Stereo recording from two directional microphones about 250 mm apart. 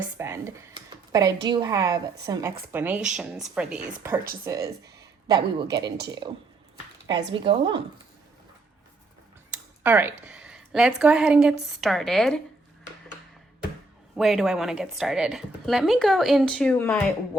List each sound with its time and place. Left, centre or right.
0.2 s a woman's voice: centre
9.8 s a woman's voice: centre
14.2 s a woman's voice: centre